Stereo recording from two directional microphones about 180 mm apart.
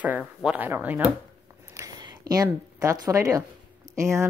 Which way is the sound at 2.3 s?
20° right (ahead or behind).